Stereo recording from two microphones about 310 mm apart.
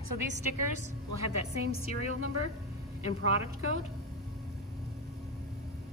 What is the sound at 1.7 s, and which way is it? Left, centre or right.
Speech, left.